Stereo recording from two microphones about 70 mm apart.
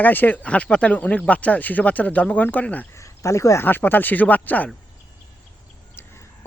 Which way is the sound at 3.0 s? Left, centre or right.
Left.